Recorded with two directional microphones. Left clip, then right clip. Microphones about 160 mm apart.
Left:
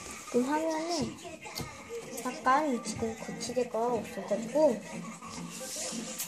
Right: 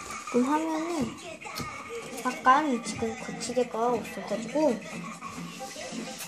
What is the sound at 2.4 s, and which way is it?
A woman's voice, centre (ahead or behind).